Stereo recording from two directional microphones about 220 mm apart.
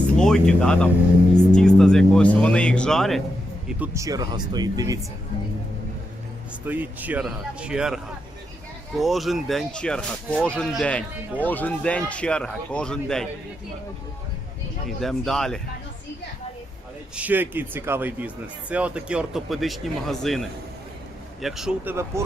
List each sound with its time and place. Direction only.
0.2 s speech: 5° left (ahead or behind)
3.7 s speech: 10° right (ahead or behind)
6.7 s speech: 10° right (ahead or behind)
14.8 s speech: centre (ahead or behind)
17.2 s speech: 10° right (ahead or behind)
21.4 s speech: centre (ahead or behind)